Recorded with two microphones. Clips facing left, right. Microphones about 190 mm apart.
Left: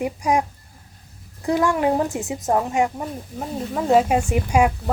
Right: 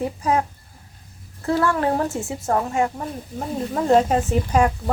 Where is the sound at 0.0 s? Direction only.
15° left (ahead or behind).